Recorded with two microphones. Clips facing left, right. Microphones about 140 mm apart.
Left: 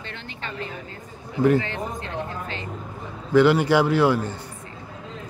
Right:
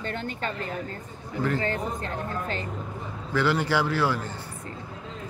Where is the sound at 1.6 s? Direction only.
45° right (ahead or behind).